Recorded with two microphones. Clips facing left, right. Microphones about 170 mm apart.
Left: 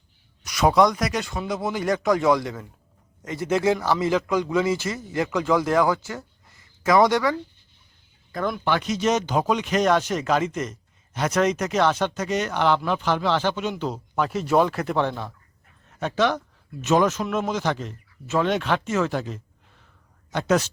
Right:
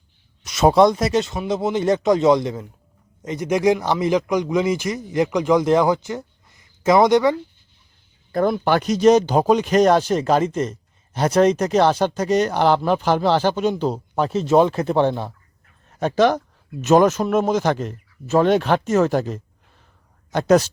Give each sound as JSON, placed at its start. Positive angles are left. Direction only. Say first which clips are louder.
{"t": 0.4, "sound": "speech", "louder": "right 4 dB", "side_deg": -25}
{"t": 8.3, "sound": "speech", "louder": "right 6 dB", "side_deg": -35}